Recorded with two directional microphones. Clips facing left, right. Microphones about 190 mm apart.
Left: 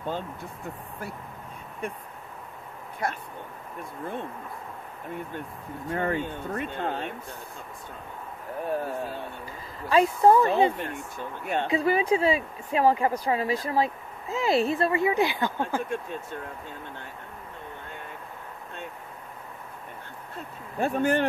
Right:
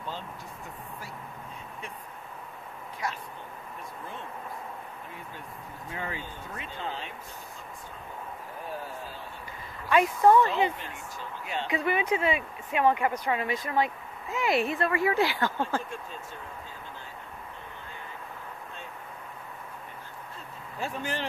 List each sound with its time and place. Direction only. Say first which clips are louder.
3.0 s speech: left 4 dB; 55° left (ahead or behind)
5.9 s speech: left 10 dB; 55° left (ahead or behind)
8.6 s speech: left 9 dB; 60° left (ahead or behind)
9.8 s speech: left 2 dB; 30° left (ahead or behind)
10.8 s speech: left 6 dB; 55° left (ahead or behind)
11.7 s speech: left 4 dB; 30° left (ahead or behind); by 15.8 s 15° left (ahead or behind)
15.9 s speech: left 7 dB; 60° left (ahead or behind)
20.8 s speech: left 10 dB; 55° left (ahead or behind)